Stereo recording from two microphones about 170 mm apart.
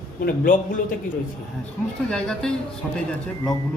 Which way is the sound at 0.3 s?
55° left (ahead or behind).